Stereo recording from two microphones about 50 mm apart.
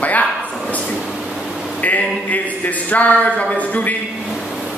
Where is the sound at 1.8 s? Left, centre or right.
Left.